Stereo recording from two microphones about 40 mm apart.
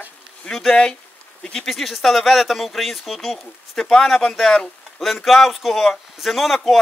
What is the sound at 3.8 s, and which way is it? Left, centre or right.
Speech, centre.